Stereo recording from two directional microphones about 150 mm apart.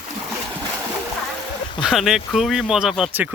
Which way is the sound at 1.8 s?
5° right (ahead or behind).